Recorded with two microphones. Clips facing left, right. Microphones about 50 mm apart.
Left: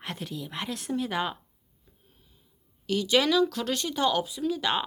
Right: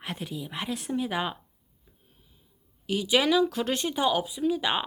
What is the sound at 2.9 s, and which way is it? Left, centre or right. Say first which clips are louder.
Speech: even; centre.